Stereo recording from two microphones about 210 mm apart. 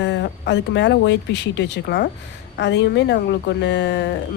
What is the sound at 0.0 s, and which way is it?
Speech, 60° left (ahead or behind).